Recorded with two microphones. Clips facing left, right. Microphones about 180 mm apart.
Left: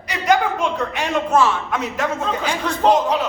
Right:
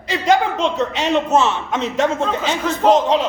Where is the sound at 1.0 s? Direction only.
25° right (ahead or behind).